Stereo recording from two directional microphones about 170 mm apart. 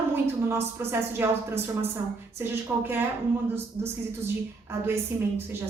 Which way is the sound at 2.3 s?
15° right (ahead or behind).